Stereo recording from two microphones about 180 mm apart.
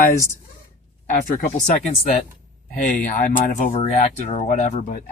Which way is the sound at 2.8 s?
45° left (ahead or behind).